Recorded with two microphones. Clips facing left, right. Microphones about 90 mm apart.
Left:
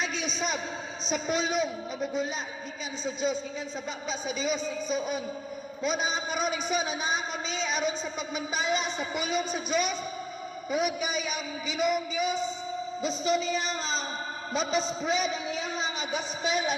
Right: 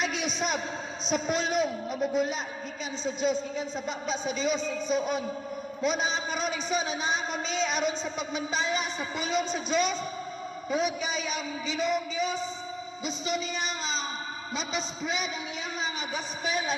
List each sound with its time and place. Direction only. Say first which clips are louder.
0.0 s a sound: right 2 dB; 5° right (ahead or behind)
1.1 s a man's voice: right 1 dB; centre (ahead or behind)
7.1 s speech: right 1 dB; centre (ahead or behind)
8.7 s a man's voice: left 2 dB; 20° left (ahead or behind)
9.3 s a man's voice: right 2 dB; 5° left (ahead or behind)
13.0 s speech: left 4 dB; 35° left (ahead or behind)
16.1 s a man's voice: left 3 dB; 20° left (ahead or behind)